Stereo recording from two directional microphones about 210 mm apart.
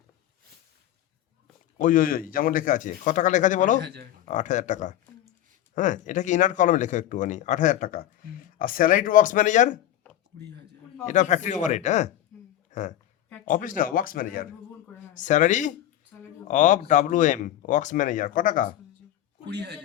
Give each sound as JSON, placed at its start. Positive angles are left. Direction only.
{"t": 1.8, "sound": "speech", "side_deg": 40}
{"t": 3.8, "sound": "speech", "side_deg": -50}
{"t": 4.3, "sound": "speech", "side_deg": 35}
{"t": 11.0, "sound": "speech", "side_deg": 35}
{"t": 19.5, "sound": "speech", "side_deg": -55}